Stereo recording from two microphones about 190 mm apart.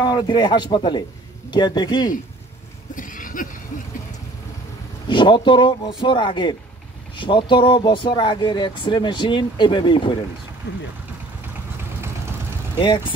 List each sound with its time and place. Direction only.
0.0 s speech: 25° left (ahead or behind)
3.0 s a sound: 45° left (ahead or behind)
5.0 s speech: 25° left (ahead or behind)
12.7 s speech: 25° left (ahead or behind)